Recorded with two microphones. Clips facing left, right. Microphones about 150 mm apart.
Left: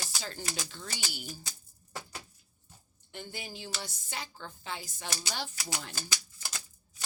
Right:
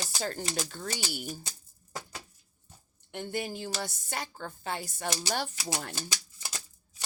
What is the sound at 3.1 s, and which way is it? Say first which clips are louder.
A woman's voice: right 8 dB; 55° right (ahead or behind).